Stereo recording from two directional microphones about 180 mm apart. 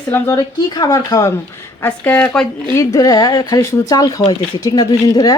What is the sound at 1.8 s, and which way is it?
Speech, 10° left (ahead or behind).